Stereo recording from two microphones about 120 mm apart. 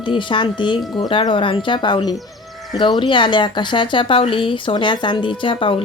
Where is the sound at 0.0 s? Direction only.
45° left (ahead or behind).